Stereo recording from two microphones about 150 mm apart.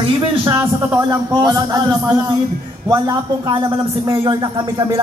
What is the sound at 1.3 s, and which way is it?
Speech, 25° right (ahead or behind).